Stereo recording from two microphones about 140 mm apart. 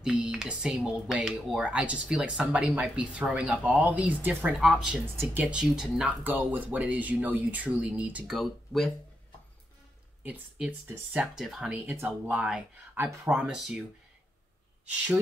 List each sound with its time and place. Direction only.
0.0 s speech: 5° right (ahead or behind)
10.2 s speech: 10° right (ahead or behind)
13.5 s speech: 5° right (ahead or behind)